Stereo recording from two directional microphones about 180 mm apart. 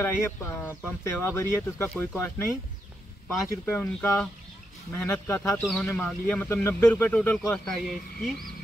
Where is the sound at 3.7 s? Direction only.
10° left (ahead or behind).